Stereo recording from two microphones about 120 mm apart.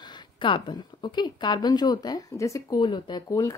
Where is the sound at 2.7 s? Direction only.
40° left (ahead or behind); by 3.6 s 25° left (ahead or behind).